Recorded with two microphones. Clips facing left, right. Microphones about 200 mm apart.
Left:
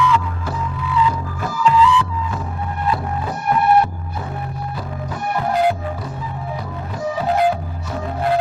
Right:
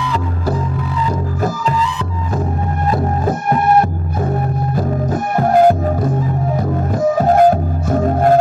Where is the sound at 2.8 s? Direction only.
45° right (ahead or behind).